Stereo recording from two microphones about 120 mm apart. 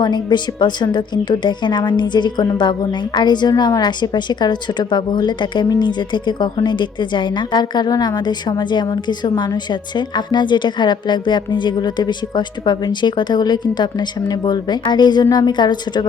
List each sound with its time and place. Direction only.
0.0 s a woman's voice: 40° left (ahead or behind)